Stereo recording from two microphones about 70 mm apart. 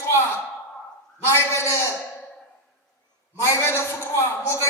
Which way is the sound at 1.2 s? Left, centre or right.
Left.